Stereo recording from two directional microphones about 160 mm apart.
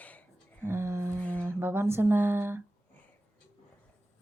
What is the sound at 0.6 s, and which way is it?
Speech, 15° right (ahead or behind).